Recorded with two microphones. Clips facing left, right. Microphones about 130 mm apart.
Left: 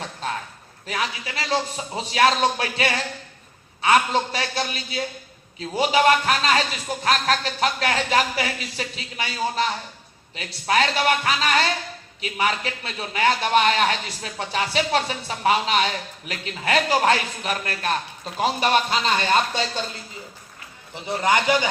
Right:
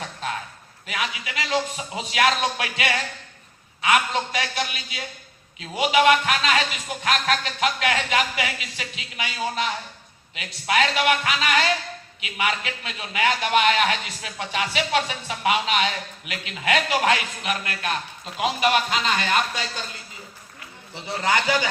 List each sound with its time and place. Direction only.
0.9 s a man's voice: 35° left (ahead or behind)
20.9 s a man's voice: 20° left (ahead or behind)